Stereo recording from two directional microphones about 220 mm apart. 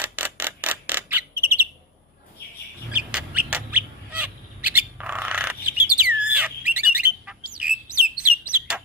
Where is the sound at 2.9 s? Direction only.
5° right (ahead or behind).